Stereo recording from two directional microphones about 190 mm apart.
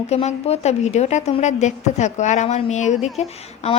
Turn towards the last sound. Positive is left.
turn(degrees=35)  # may be behind; listen again after turning